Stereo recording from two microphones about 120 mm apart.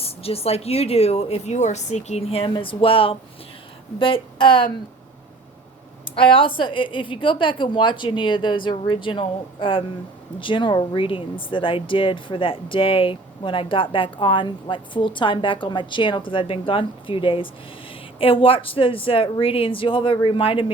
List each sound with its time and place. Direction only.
0.0 s speech: 55° left (ahead or behind)
6.1 s speech: 45° left (ahead or behind)